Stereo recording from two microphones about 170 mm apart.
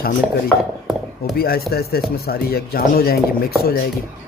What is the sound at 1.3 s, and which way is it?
Speech, 65° left (ahead or behind).